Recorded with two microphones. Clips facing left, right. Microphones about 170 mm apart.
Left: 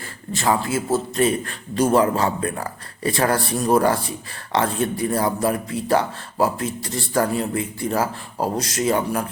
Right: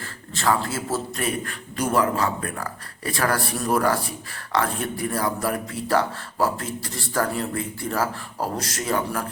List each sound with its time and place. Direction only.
0.3 s speech: 15° left (ahead or behind)